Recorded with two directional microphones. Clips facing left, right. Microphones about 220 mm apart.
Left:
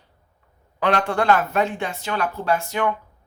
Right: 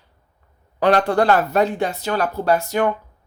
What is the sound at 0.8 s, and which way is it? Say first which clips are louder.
Speech: right 5 dB; 40° right (ahead or behind).